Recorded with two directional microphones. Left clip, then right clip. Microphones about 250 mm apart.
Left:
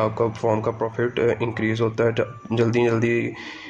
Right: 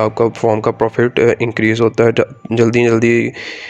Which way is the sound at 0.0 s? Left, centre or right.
Right.